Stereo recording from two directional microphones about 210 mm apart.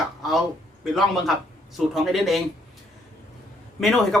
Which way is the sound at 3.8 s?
Centre (ahead or behind).